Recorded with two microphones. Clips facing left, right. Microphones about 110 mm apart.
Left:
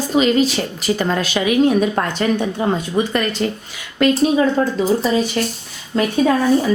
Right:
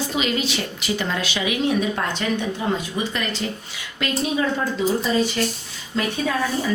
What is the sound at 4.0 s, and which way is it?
Speech, 45° left (ahead or behind).